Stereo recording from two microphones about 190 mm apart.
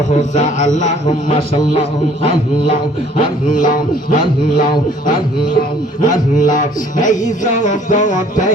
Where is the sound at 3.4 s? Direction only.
45° left (ahead or behind).